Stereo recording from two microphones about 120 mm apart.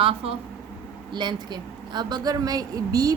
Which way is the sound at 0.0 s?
50° right (ahead or behind).